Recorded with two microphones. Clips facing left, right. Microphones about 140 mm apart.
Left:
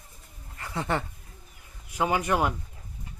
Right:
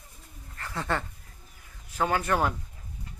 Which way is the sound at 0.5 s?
20° left (ahead or behind).